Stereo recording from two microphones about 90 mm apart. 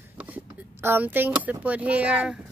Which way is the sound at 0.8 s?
20° right (ahead or behind).